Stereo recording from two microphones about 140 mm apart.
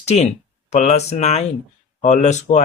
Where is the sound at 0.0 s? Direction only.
50° left (ahead or behind).